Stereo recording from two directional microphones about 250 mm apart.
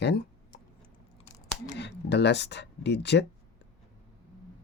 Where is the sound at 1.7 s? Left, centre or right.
Left.